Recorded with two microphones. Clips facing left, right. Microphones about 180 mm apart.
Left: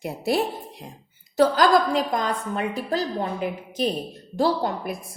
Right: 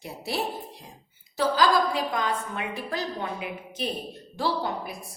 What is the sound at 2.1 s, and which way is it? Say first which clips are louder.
A woman's voice: left 3 dB; 40° left (ahead or behind).